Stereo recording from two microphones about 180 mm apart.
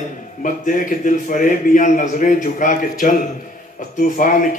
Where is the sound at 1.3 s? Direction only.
45° left (ahead or behind).